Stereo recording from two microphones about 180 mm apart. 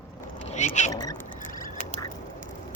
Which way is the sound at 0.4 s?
40° left (ahead or behind).